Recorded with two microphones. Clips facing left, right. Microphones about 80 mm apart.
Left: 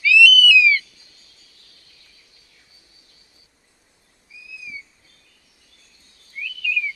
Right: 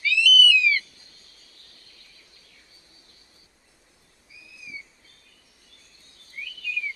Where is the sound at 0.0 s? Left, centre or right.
Right.